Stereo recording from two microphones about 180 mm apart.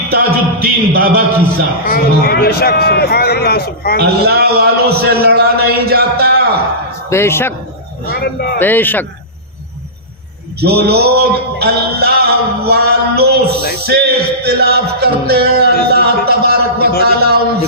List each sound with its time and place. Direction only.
0.1 s music: 55° right (ahead or behind)
1.9 s a man's voice: 60° left (ahead or behind)
4.0 s music: 60° right (ahead or behind)
7.1 s speech: 15° left (ahead or behind)
8.1 s a man's voice: 60° left (ahead or behind)
8.5 s speech: 10° left (ahead or behind)
10.6 s music: 65° right (ahead or behind)